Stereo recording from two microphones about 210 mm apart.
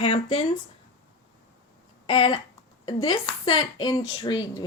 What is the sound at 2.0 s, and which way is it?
A woman's voice, 25° left (ahead or behind).